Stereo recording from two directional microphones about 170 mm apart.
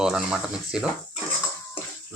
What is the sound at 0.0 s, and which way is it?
Speech, 5° right (ahead or behind).